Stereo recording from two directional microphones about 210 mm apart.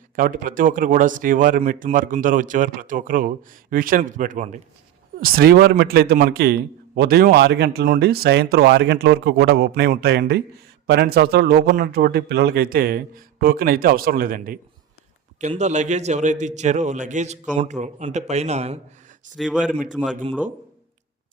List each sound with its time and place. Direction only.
0.2 s a man's voice: 40° right (ahead or behind)
19.4 s speech: 5° right (ahead or behind)